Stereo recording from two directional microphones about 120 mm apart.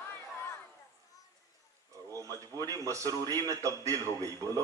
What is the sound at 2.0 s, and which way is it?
A man's voice, 30° right (ahead or behind).